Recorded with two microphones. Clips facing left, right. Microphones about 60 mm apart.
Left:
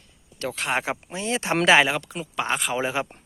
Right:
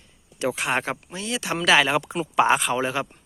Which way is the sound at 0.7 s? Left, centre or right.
Centre.